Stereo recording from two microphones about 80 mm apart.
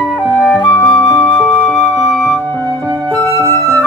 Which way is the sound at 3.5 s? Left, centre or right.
Left.